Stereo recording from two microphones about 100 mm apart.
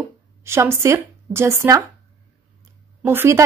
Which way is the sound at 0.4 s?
25° right (ahead or behind).